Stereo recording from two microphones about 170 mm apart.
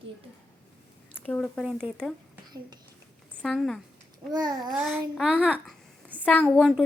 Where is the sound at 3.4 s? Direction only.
Centre (ahead or behind).